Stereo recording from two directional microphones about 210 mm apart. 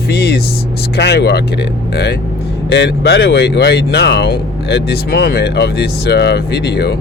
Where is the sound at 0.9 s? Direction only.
55° left (ahead or behind).